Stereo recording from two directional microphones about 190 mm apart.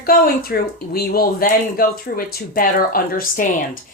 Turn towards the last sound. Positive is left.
turn(degrees=50)  # may be behind; listen again after turning